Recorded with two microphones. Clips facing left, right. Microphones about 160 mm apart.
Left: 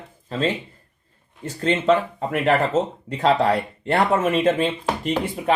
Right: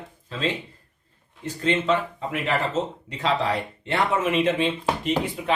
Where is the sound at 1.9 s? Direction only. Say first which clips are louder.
Left 5 dB; 45° left (ahead or behind).